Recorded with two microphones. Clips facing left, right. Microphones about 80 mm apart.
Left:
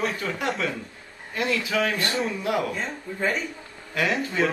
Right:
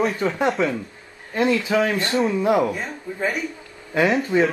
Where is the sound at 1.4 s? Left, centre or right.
Centre.